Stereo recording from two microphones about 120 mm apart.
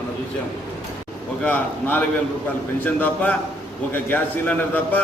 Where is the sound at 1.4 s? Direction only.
15° left (ahead or behind).